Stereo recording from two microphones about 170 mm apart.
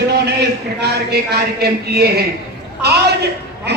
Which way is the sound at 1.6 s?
70° right (ahead or behind).